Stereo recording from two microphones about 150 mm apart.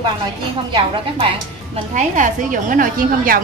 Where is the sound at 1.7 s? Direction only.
50° right (ahead or behind); by 3.4 s 70° right (ahead or behind).